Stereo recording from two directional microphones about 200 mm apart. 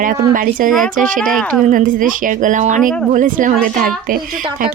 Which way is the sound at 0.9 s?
40° right (ahead or behind).